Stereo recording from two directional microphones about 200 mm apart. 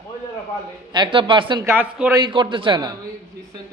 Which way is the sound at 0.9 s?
25° right (ahead or behind).